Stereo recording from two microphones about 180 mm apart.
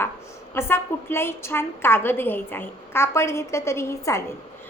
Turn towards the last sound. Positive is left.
turn(degrees=15)  # may be behind; listen again after turning